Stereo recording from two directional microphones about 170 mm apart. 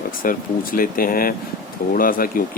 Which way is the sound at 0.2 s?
55° left (ahead or behind).